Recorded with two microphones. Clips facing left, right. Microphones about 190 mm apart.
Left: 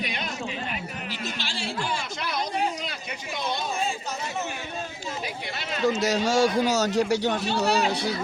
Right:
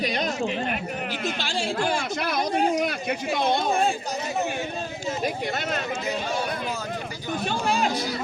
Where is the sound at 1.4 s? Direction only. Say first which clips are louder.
Right 6 dB; 50° right (ahead or behind).